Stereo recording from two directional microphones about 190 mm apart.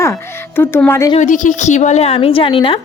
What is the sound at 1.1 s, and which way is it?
A woman's voice, 40° left (ahead or behind).